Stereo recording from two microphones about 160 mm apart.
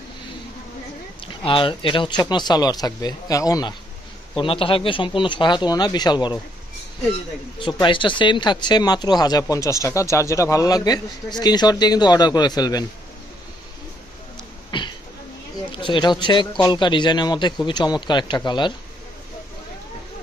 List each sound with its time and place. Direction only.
1.2 s speech: 35° left (ahead or behind)
4.4 s speech: 35° left (ahead or behind)
14.7 s a sound: 30° left (ahead or behind)
15.7 s speech: 30° left (ahead or behind)